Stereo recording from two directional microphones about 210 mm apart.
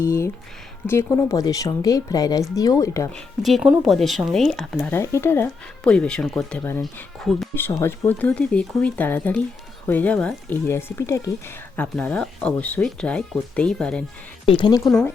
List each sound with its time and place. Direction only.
0.0 s speech: 15° left (ahead or behind)
3.4 s speech: centre (ahead or behind)
14.4 s speech: 20° left (ahead or behind)
14.8 s speech: 5° left (ahead or behind)